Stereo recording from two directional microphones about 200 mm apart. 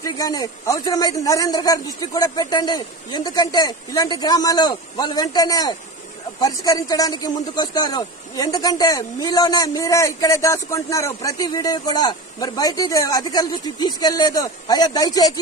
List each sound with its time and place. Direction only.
0.0 s a man's voice: 20° left (ahead or behind)